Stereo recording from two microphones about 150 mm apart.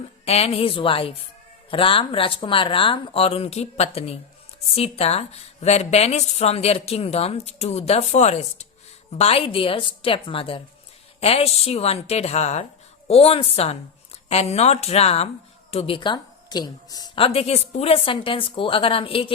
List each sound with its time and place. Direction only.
0.3 s a woman's voice: 45° left (ahead or behind)